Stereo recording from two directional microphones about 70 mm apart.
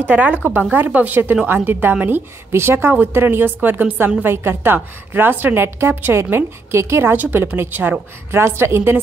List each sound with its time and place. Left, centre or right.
0.0 s a woman's voice: right